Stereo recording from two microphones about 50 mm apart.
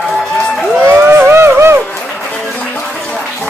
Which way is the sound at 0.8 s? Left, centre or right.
Right.